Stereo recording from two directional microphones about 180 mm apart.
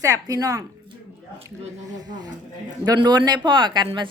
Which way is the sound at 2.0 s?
25° right (ahead or behind).